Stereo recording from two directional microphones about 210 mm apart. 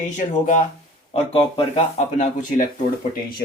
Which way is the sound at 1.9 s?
40° left (ahead or behind).